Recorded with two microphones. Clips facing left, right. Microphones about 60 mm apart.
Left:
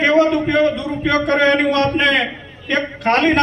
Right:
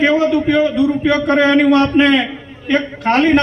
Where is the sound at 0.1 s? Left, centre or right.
Left.